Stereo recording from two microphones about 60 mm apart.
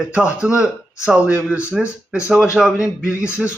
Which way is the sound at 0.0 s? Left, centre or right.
Centre.